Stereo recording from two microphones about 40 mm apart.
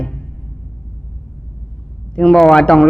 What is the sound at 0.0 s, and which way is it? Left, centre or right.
Music, left.